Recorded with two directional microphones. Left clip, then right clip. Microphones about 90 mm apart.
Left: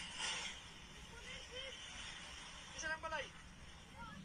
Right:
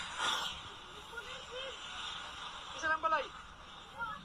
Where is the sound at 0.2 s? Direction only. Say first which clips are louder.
Right 9 dB; 50° right (ahead or behind).